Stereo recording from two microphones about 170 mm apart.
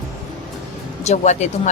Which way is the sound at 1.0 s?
40° left (ahead or behind).